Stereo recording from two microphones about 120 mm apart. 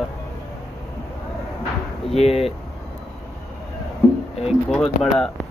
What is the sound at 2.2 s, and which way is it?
Speech, 55° left (ahead or behind).